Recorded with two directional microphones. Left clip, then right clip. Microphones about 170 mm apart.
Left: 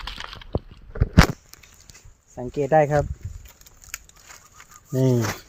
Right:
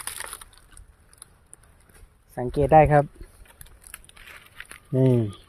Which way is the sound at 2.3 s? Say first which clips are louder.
Right 2 dB; 40° right (ahead or behind).